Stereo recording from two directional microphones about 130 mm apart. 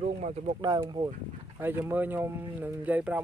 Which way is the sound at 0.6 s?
35° right (ahead or behind).